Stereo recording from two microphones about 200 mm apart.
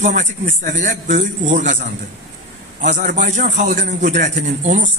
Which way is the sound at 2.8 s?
40° right (ahead or behind).